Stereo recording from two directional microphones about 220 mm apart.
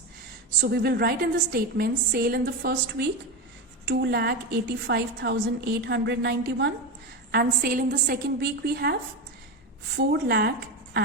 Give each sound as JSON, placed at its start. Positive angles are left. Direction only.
{"t": 0.6, "sound": "a woman's voice", "side_deg": -45}
{"t": 10.1, "sound": "a woman's voice", "side_deg": -45}